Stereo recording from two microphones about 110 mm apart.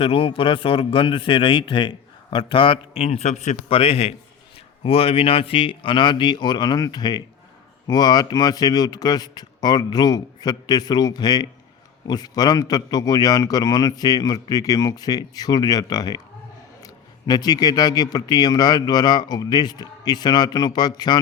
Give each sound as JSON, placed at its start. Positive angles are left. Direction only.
{"t": 0.0, "sound": "speech", "side_deg": 55}
{"t": 2.9, "sound": "a man's voice", "side_deg": 70}